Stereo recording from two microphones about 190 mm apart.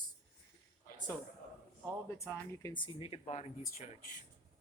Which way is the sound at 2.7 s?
25° left (ahead or behind).